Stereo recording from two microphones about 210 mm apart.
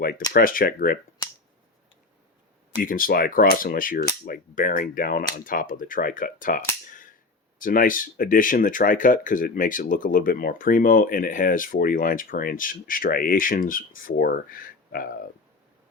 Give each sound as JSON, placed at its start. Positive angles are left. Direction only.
{"t": 0.3, "sound": "speech", "side_deg": 40}
{"t": 2.8, "sound": "speech", "side_deg": 40}